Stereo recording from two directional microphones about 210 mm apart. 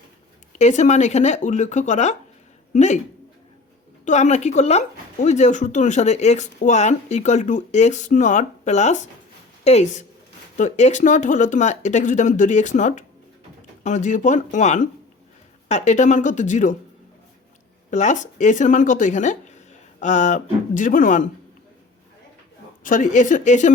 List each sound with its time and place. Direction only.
0.5 s speech: 35° left (ahead or behind)
4.0 s speech: 35° left (ahead or behind)
17.9 s speech: 35° left (ahead or behind)
22.8 s speech: 40° left (ahead or behind)